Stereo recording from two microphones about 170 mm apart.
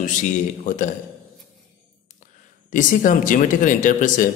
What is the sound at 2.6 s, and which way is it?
A man's voice, 50° left (ahead or behind).